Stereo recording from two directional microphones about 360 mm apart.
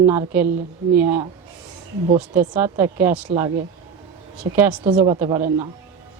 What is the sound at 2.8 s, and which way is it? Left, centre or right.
Speech, centre.